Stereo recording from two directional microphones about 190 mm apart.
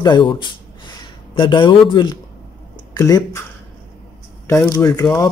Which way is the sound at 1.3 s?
25° left (ahead or behind).